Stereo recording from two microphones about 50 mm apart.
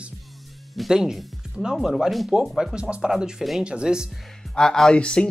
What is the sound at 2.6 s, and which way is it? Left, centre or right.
A man's voice, centre.